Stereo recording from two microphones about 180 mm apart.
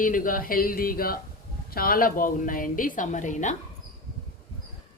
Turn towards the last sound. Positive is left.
turn(degrees=45)  # may be behind; listen again after turning